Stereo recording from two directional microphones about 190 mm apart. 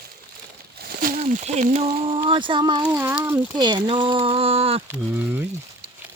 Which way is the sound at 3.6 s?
20° right (ahead or behind).